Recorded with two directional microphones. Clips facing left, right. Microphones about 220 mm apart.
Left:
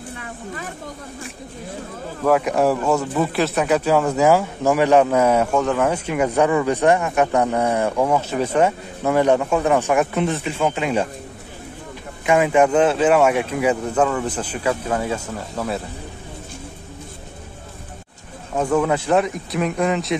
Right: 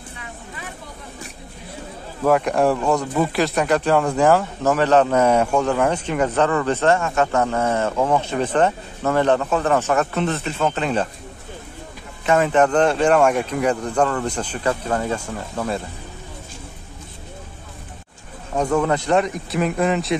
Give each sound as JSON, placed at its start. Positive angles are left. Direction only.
{"t": 2.2, "sound": "speech", "side_deg": 5}
{"t": 12.3, "sound": "speech", "side_deg": 10}
{"t": 18.5, "sound": "speech", "side_deg": 5}